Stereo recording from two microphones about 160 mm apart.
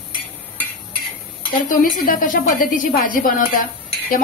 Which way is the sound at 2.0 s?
60° left (ahead or behind).